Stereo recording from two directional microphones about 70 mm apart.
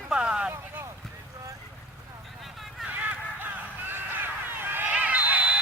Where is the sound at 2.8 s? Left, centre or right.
Centre.